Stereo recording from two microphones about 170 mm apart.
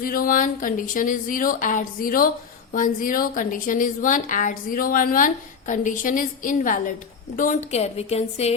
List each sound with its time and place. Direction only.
0.0 s a woman's voice: 55° left (ahead or behind); by 8.5 s 40° left (ahead or behind)